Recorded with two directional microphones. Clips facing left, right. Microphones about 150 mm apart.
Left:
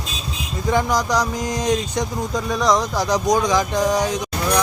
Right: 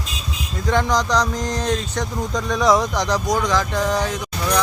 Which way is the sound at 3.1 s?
15° left (ahead or behind).